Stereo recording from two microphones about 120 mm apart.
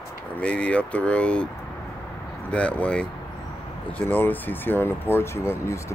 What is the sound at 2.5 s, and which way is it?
Speech, 10° left (ahead or behind).